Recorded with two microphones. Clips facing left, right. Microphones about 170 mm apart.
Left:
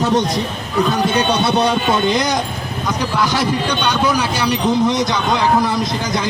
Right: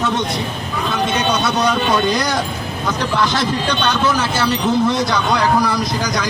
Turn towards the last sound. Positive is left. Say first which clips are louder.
# even
turn(degrees=20)  # may be behind; listen again after turning